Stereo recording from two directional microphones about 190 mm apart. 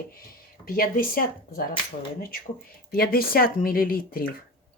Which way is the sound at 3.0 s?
50° left (ahead or behind).